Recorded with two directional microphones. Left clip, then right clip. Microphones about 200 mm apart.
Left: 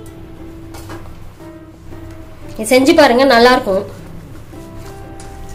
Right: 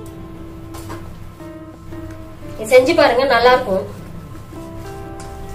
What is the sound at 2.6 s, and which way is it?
Speech, 55° left (ahead or behind).